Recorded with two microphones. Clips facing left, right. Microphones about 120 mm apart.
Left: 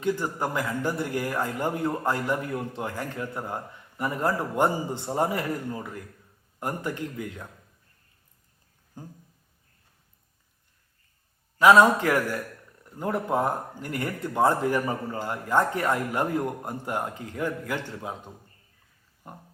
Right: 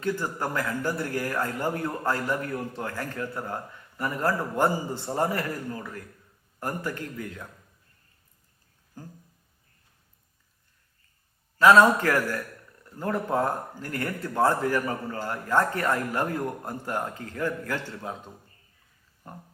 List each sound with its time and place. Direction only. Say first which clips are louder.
0.0 s a man's voice: left 2 dB; 15° left (ahead or behind)
8.9 s a sound: left 1 dB; 20° left (ahead or behind)
11.6 s a man's voice: even; 15° left (ahead or behind)
19.2 s a man's voice: even; 15° left (ahead or behind)